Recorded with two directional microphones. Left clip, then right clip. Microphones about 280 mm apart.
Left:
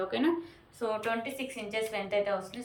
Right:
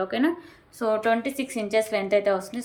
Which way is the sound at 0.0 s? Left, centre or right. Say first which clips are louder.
Right 5 dB; centre.